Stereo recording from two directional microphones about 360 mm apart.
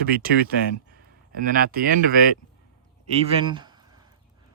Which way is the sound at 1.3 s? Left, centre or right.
Right.